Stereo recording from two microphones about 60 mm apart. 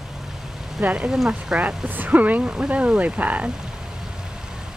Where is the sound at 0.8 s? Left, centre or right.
Right.